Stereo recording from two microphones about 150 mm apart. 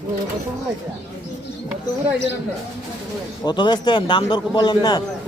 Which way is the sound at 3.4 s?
30° left (ahead or behind).